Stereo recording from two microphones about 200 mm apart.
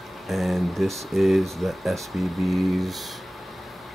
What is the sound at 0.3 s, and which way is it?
Speech, centre (ahead or behind).